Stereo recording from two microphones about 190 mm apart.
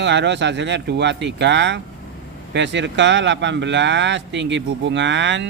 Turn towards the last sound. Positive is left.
turn(degrees=-70)  # may be behind; listen again after turning